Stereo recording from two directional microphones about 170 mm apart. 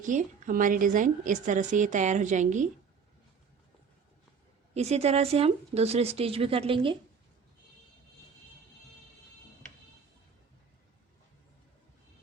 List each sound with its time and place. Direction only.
0.0 s a woman's voice: 50° right (ahead or behind)
4.7 s speech: 40° right (ahead or behind)